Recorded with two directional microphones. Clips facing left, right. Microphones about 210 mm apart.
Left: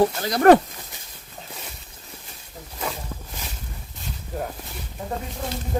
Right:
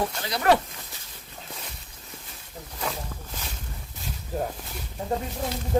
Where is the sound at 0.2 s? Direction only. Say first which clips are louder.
Left 7 dB; 45° left (ahead or behind).